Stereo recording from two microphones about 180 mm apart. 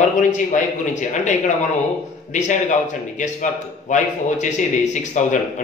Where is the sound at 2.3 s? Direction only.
45° left (ahead or behind).